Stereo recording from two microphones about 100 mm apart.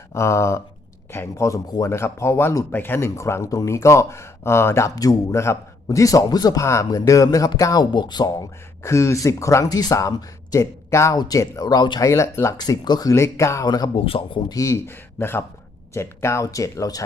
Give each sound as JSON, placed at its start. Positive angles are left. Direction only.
{"t": 0.1, "sound": "a man's voice", "side_deg": 30}
{"t": 12.0, "sound": "a man's voice", "side_deg": 30}
{"t": 12.5, "sound": "speech", "side_deg": 45}
{"t": 13.7, "sound": "speech", "side_deg": 40}
{"t": 13.9, "sound": "a man's voice", "side_deg": 65}
{"t": 14.5, "sound": "a man's voice", "side_deg": 35}